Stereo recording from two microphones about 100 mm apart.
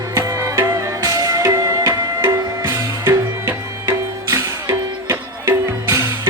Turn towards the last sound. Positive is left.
turn(degrees=-30)  # may be behind; listen again after turning